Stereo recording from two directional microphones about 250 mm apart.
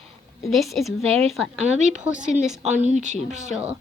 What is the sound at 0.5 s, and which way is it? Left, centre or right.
A woman's voice, centre.